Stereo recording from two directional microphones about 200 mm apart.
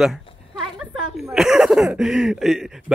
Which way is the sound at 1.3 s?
Centre (ahead or behind).